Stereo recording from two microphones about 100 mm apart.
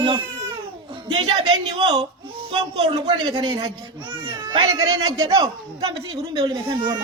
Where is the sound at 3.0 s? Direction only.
50° right (ahead or behind).